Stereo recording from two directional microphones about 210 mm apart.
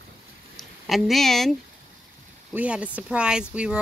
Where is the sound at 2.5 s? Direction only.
5° right (ahead or behind).